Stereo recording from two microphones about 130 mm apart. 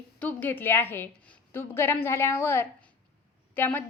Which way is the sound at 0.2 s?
10° left (ahead or behind).